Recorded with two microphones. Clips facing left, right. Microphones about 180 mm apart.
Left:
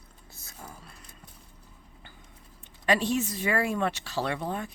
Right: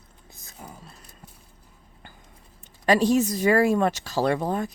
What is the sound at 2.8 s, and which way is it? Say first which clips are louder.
Speech: right 6 dB; 40° right (ahead or behind).